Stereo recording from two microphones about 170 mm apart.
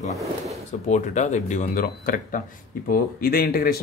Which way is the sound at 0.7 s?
45° left (ahead or behind).